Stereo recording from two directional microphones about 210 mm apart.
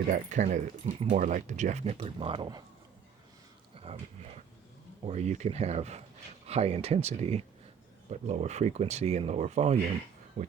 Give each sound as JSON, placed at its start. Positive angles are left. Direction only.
{"t": 0.1, "sound": "speech", "side_deg": -35}
{"t": 3.9, "sound": "a sound", "side_deg": -25}
{"t": 5.0, "sound": "speech", "side_deg": -30}